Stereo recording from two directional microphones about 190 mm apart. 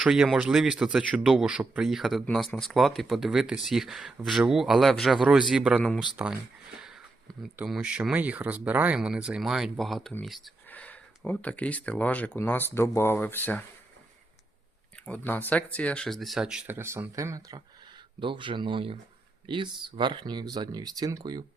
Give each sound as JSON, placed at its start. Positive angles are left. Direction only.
{"t": 0.0, "sound": "speech", "side_deg": 0}
{"t": 7.4, "sound": "speech", "side_deg": -5}
{"t": 14.9, "sound": "speech", "side_deg": 5}